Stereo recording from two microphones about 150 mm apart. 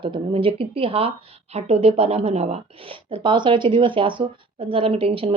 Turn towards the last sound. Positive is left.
turn(degrees=-40)  # may be behind; listen again after turning